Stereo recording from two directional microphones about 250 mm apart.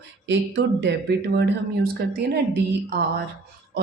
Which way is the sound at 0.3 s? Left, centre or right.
Right.